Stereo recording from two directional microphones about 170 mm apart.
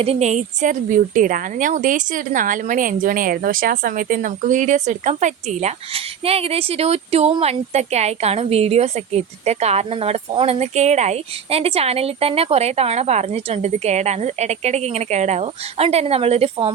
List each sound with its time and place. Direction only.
0.0 s a woman's voice: 40° right (ahead or behind)